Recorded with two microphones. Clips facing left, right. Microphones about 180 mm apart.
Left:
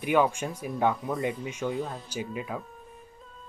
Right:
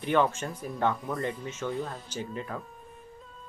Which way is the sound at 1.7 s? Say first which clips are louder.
Left 2 dB; centre (ahead or behind).